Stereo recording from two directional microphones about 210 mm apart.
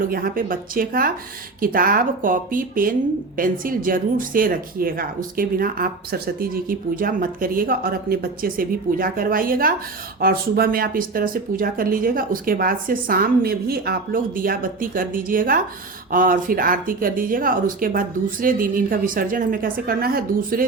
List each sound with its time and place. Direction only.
0.0 s speech: 45° right (ahead or behind)